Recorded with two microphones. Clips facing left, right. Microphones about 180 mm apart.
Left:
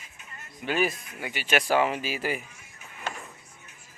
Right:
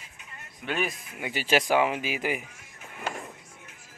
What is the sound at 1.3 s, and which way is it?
Speech, 35° right (ahead or behind).